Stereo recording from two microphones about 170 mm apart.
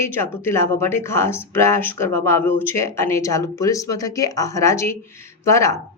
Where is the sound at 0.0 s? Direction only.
15° left (ahead or behind).